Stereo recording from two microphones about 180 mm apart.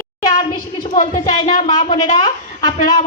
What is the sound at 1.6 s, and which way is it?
A child's voice, 20° left (ahead or behind).